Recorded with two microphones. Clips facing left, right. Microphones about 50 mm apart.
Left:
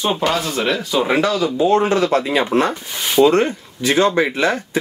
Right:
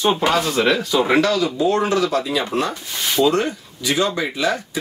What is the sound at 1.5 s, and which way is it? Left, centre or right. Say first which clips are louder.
Speech: left 3 dB; left.